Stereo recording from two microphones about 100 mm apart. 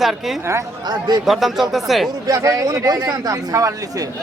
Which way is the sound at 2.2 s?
35° right (ahead or behind).